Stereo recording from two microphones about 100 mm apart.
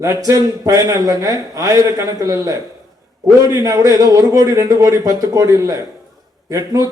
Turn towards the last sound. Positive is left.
turn(degrees=-35)  # may be behind; listen again after turning